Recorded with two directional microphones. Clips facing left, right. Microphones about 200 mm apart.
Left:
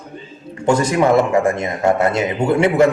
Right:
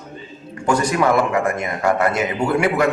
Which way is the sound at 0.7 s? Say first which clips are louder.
Left 3 dB; 25° left (ahead or behind).